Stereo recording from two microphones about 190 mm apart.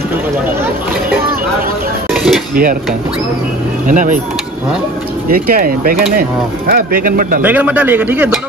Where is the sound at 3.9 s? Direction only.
45° right (ahead or behind).